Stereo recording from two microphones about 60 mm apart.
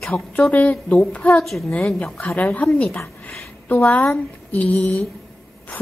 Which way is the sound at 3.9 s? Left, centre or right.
Left.